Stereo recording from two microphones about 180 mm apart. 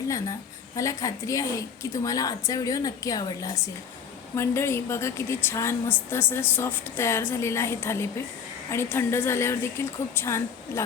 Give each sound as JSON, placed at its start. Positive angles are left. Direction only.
{"t": 0.8, "sound": "a woman's voice", "side_deg": 20}